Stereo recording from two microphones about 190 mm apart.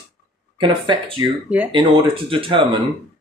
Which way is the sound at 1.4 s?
5° right (ahead or behind).